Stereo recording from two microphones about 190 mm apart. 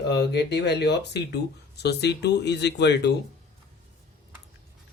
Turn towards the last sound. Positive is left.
turn(degrees=65)  # may be behind; listen again after turning